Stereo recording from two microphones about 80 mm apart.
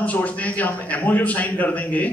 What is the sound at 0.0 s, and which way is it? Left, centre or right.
A man's voice, centre.